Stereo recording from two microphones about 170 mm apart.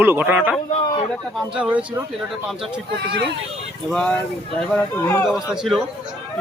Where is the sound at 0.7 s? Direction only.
35° left (ahead or behind).